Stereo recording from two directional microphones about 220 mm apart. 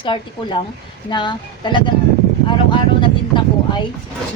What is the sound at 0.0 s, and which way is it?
Speech, 20° left (ahead or behind).